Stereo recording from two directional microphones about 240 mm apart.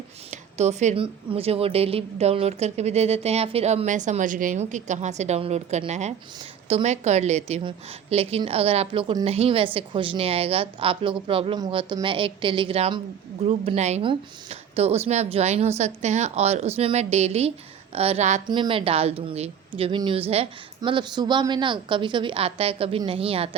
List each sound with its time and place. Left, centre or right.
0.3 s speech: right